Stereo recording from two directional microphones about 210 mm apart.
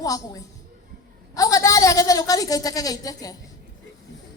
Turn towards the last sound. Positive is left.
turn(degrees=15)  # may be behind; listen again after turning